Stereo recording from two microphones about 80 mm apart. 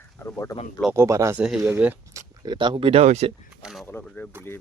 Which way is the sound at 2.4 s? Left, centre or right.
Right.